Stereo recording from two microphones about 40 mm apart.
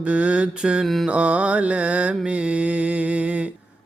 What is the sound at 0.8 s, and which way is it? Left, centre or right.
Mantra, centre.